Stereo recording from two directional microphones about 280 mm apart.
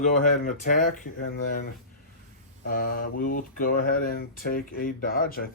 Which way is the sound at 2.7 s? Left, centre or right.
Left.